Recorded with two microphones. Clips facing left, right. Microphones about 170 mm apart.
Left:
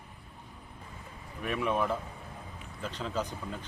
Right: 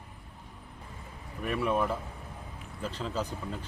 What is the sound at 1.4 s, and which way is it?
Speech, centre (ahead or behind).